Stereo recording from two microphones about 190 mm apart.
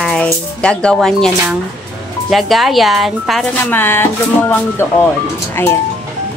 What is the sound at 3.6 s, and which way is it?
Speech, 10° left (ahead or behind).